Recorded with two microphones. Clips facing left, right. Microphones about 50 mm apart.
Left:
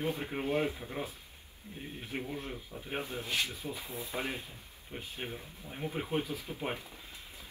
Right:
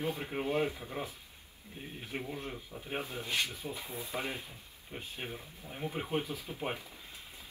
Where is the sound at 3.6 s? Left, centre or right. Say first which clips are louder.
Even; right.